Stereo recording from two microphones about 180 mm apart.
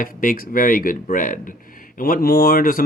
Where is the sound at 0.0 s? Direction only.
50° left (ahead or behind).